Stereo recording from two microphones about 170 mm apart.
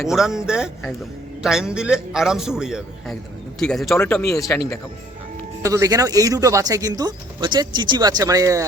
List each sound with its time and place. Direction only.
0.0 s a man's voice: centre (ahead or behind)
4.0 s speech: 15° left (ahead or behind)
5.6 s speech: 20° right (ahead or behind)